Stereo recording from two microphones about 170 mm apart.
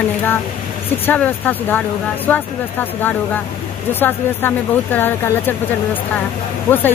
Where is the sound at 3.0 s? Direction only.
10° left (ahead or behind).